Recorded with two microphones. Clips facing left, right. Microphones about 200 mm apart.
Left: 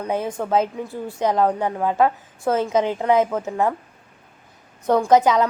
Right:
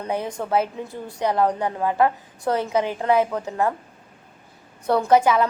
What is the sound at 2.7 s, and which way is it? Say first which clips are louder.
A woman's voice: left 1 dB; 15° left (ahead or behind).